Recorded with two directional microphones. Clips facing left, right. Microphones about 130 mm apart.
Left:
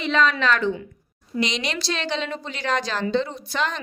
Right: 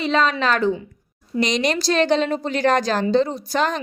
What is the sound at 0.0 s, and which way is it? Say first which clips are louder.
A woman's voice: right 2 dB; 35° right (ahead or behind).